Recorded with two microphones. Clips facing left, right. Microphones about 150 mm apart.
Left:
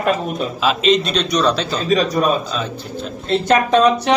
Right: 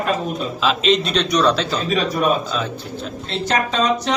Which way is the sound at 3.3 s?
55° left (ahead or behind).